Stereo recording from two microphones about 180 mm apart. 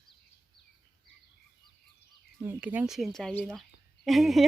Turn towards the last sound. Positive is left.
turn(degrees=0)  # may be behind; listen again after turning